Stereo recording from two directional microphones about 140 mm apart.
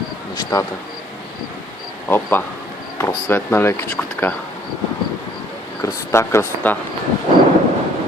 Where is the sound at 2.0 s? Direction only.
15° left (ahead or behind).